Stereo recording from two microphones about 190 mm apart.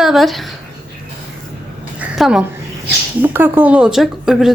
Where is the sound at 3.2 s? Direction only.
10° right (ahead or behind).